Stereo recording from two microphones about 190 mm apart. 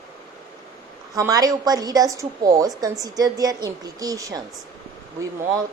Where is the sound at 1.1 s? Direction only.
20° right (ahead or behind).